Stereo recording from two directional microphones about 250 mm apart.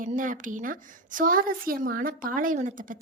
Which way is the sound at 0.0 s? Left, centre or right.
Right.